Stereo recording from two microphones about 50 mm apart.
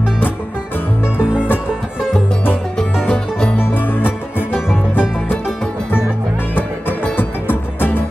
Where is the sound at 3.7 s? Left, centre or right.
Left.